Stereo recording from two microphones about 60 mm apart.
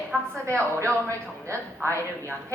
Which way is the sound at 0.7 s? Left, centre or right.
Right.